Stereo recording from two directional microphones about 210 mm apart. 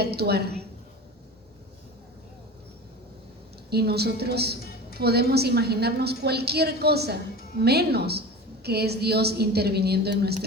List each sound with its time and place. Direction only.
0.0 s a woman's voice: 50° right (ahead or behind)
3.7 s a woman's voice: 50° right (ahead or behind)